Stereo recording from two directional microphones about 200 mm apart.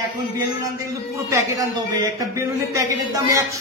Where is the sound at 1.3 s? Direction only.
20° right (ahead or behind).